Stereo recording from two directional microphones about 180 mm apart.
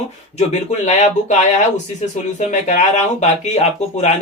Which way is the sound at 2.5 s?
40° left (ahead or behind).